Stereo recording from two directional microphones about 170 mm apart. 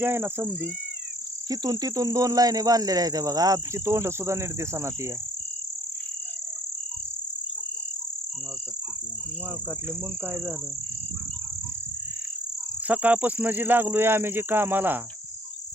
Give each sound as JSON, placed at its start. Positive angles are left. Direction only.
{"t": 0.0, "sound": "speech", "side_deg": -15}
{"t": 10.2, "sound": "speech", "side_deg": -10}
{"t": 12.9, "sound": "speech", "side_deg": -10}